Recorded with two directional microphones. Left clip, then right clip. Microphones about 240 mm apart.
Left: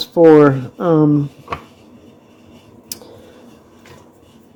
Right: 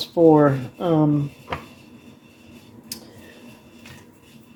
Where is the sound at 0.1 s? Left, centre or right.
Left.